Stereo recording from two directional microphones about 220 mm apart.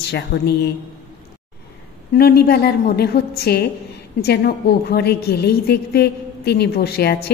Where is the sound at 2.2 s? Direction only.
45° left (ahead or behind).